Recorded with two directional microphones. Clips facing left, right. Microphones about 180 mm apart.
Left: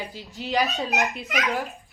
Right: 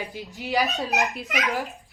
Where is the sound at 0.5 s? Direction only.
Centre (ahead or behind).